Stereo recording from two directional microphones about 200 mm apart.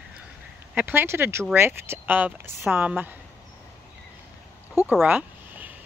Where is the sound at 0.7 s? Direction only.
10° right (ahead or behind).